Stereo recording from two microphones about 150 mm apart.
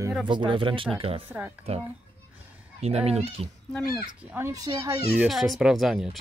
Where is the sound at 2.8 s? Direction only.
45° right (ahead or behind).